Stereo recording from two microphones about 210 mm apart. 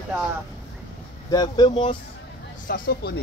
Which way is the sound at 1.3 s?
20° left (ahead or behind).